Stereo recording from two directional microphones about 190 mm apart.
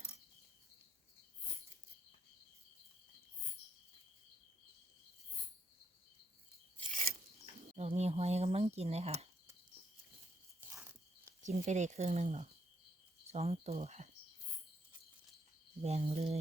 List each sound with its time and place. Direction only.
7.4 s speech: 35° right (ahead or behind)
10.8 s a sound: 15° right (ahead or behind)
11.4 s speech: 35° right (ahead or behind)
15.8 s speech: 35° right (ahead or behind)